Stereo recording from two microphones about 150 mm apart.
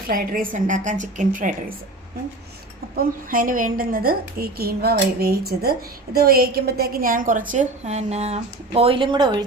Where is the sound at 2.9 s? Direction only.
75° right (ahead or behind).